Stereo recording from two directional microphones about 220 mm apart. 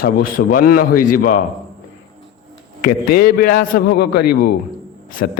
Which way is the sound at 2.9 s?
40° left (ahead or behind).